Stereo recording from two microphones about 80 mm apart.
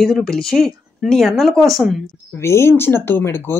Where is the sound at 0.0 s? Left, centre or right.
Centre.